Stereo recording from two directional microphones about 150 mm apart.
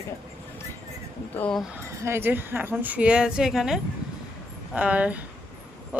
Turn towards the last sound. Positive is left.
turn(degrees=-10)  # may be behind; listen again after turning